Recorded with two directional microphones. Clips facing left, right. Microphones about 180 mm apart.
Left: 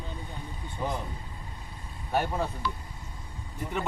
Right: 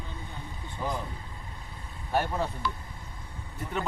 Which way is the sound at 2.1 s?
10° left (ahead or behind).